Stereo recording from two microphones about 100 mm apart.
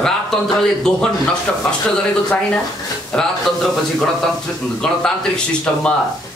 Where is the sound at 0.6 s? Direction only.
5° left (ahead or behind).